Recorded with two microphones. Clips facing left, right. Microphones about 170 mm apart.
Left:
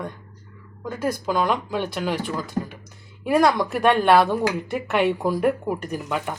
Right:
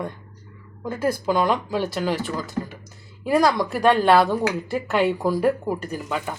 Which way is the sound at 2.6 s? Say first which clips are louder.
Left 2 dB; 15° left (ahead or behind).